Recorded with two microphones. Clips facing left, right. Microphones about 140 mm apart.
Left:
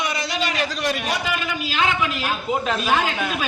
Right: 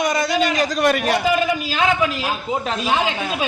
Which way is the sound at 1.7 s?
35° right (ahead or behind).